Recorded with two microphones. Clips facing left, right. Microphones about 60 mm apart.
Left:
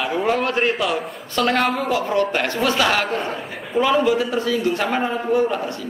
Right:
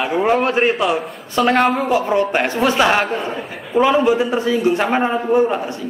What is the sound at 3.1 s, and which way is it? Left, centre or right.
Speech, centre.